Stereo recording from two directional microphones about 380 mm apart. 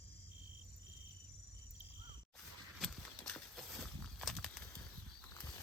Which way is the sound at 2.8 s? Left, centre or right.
Centre.